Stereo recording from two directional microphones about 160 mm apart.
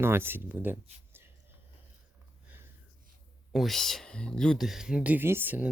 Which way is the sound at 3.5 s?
Centre (ahead or behind).